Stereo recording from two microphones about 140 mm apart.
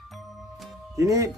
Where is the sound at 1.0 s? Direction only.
25° right (ahead or behind).